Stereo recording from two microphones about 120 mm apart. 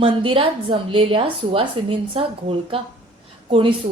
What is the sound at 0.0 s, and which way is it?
A woman's voice, 50° right (ahead or behind).